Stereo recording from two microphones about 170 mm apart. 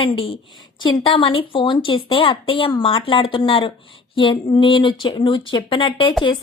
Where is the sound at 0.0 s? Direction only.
30° left (ahead or behind).